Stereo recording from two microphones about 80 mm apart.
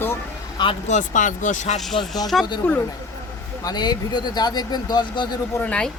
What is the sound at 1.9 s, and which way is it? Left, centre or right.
Speech, left.